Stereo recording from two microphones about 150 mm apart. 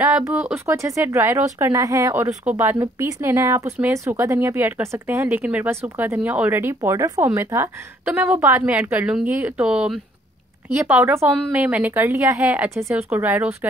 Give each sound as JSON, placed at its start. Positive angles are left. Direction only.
{"t": 0.3, "sound": "a woman's voice", "side_deg": -5}
{"t": 0.8, "sound": "a woman's voice", "side_deg": -20}